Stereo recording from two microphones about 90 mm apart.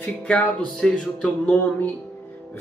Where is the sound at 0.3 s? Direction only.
10° left (ahead or behind).